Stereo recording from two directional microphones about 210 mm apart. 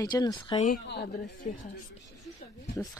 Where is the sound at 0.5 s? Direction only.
45° left (ahead or behind).